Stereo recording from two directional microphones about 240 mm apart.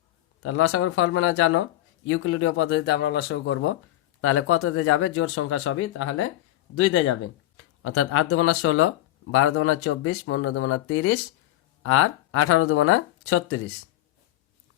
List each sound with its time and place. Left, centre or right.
0.4 s speech: left